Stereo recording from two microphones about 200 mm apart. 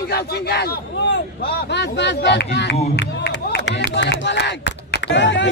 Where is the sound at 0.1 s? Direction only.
55° left (ahead or behind).